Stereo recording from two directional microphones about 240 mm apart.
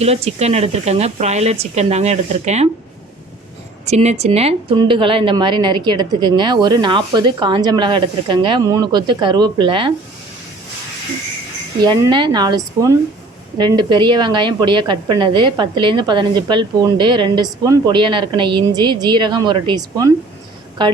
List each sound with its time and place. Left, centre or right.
0.0 s a woman's voice: right
3.8 s a woman's voice: right
11.8 s a woman's voice: centre